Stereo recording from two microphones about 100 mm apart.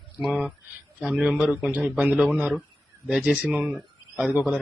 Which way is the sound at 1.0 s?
10° right (ahead or behind).